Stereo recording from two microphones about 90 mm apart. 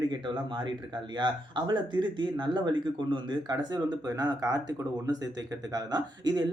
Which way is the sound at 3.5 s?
45° right (ahead or behind).